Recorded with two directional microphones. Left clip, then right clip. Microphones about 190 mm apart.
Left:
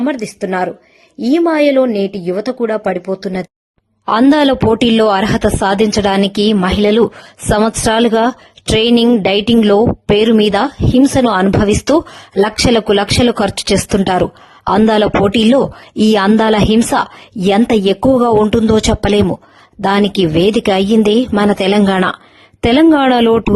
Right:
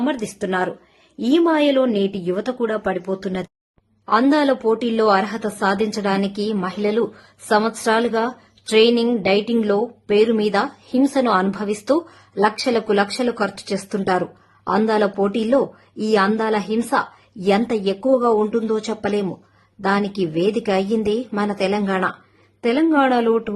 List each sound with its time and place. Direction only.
0.0 s a woman's voice: 25° left (ahead or behind)
4.0 s speech: 45° left (ahead or behind)